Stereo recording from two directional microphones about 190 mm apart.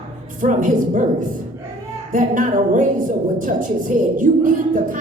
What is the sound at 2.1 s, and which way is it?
A woman's voice, 45° right (ahead or behind).